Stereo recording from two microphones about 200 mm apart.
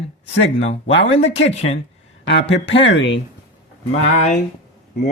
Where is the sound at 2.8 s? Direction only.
65° left (ahead or behind).